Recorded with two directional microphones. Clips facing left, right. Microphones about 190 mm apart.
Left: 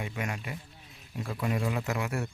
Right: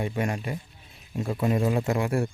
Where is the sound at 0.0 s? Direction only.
35° right (ahead or behind).